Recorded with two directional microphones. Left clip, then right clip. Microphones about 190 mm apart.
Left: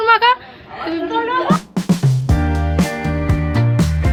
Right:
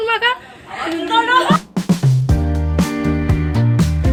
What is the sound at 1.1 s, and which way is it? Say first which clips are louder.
Music: right 5 dB; 5° left (ahead or behind).